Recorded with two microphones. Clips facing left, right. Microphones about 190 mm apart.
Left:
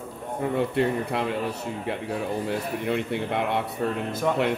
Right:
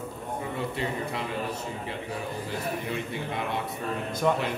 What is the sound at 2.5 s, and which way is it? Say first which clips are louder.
Speech: left 5 dB; 65° left (ahead or behind).